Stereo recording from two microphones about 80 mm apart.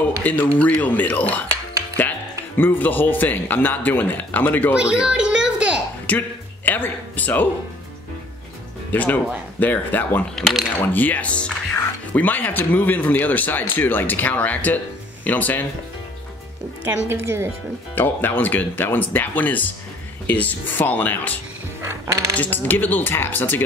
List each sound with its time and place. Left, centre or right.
0.2 s speech: left
1.5 s cutlery: right
2.5 s speech: left
4.7 s a sound: centre
6.0 s a sound: left
8.9 s speech: left
17.1 s speech: right
17.9 s speech: left
21.8 s cutlery: right
22.4 s speech: left